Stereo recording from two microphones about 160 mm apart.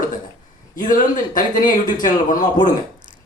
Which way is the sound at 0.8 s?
55° left (ahead or behind).